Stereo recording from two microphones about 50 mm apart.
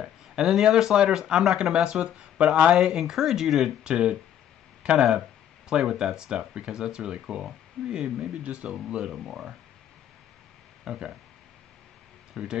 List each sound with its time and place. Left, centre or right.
0.4 s speech: centre
3.0 s speech: centre
10.9 s speech: centre
12.4 s speech: centre